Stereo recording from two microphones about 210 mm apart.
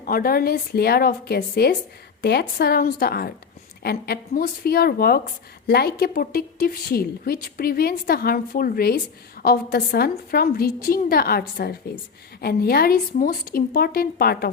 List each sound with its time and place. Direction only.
0.0 s a woman's voice: 45° left (ahead or behind)